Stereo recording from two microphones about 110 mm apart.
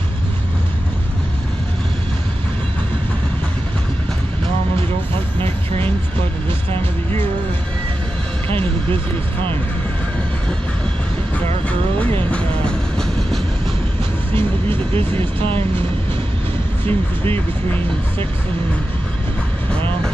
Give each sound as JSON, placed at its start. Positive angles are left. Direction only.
{"t": 8.5, "sound": "vehicle", "side_deg": 15}
{"t": 12.0, "sound": "vehicle", "side_deg": 15}
{"t": 14.3, "sound": "vehicle", "side_deg": -55}
{"t": 16.8, "sound": "speech", "side_deg": 20}